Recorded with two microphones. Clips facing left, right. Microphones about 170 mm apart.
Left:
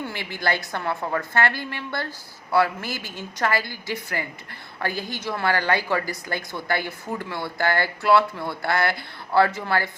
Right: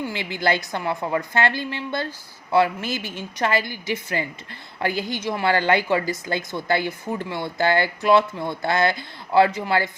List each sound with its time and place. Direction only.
0.0 s a woman's voice: 20° right (ahead or behind)